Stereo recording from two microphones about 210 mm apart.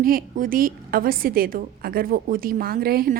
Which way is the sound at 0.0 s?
40° right (ahead or behind).